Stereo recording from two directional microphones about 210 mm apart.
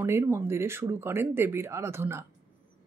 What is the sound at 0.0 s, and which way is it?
Speech, 10° right (ahead or behind).